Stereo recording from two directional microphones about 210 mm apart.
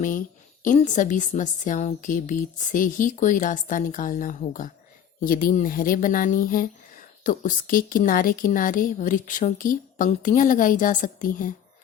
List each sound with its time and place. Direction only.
0.6 s speech: 35° left (ahead or behind)